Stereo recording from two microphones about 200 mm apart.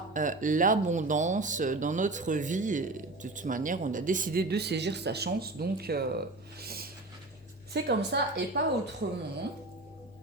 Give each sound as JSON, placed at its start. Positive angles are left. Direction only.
{"t": 0.1, "sound": "a woman's voice", "side_deg": -40}